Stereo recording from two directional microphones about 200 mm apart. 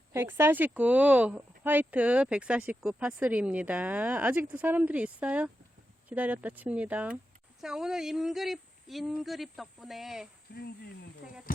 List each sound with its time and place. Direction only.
0.1 s speech: 10° right (ahead or behind)
10.5 s speech: 55° left (ahead or behind)